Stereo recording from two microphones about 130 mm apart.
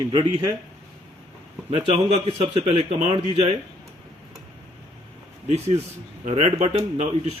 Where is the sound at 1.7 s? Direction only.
55° right (ahead or behind).